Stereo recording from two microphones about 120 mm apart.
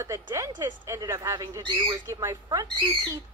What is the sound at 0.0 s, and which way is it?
A woman's voice, 25° right (ahead or behind).